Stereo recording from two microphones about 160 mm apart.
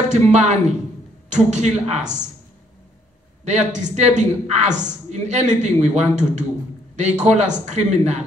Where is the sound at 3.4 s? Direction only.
45° right (ahead or behind).